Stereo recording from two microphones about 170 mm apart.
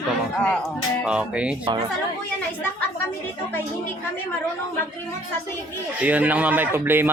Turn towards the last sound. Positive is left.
turn(degrees=-10)  # may be behind; listen again after turning